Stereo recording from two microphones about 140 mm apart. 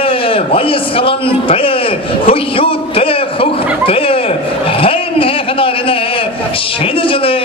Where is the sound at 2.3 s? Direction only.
40° left (ahead or behind).